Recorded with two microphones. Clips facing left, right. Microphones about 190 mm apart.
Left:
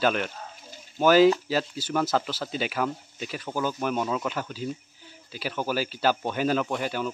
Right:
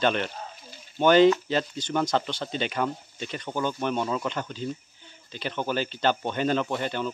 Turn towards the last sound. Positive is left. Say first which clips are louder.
# even
turn(degrees=5)  # may be behind; listen again after turning